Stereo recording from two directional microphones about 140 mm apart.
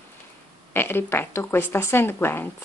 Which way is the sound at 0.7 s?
15° left (ahead or behind).